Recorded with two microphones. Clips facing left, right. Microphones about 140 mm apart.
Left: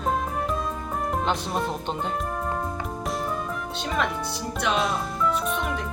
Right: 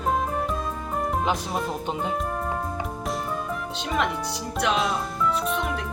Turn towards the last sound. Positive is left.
turn(degrees=0)  # may be behind; listen again after turning